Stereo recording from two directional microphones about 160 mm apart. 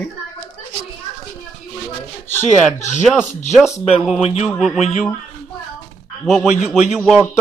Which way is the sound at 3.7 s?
40° left (ahead or behind).